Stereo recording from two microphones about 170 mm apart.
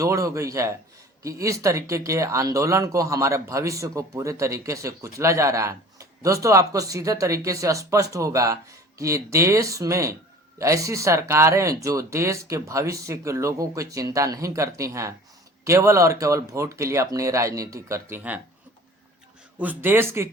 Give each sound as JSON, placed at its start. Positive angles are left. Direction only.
{"t": 0.0, "sound": "speech", "side_deg": -20}
{"t": 19.5, "sound": "speech", "side_deg": -10}